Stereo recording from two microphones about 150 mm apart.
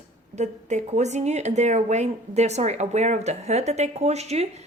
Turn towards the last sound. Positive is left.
turn(degrees=-45)  # may be behind; listen again after turning